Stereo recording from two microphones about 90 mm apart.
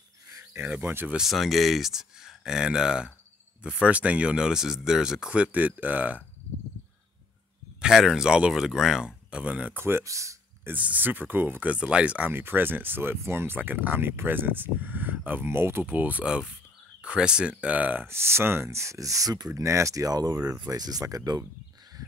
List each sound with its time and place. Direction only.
0.4 s cricket: 30° right (ahead or behind)
0.7 s speech: 20° right (ahead or behind)
1.1 s speech: centre (ahead or behind); by 6.2 s 20° right (ahead or behind)
7.8 s speech: 5° right (ahead or behind); by 10.7 s 35° right (ahead or behind)
10.7 s speech: 15° right (ahead or behind); by 21.5 s 45° right (ahead or behind)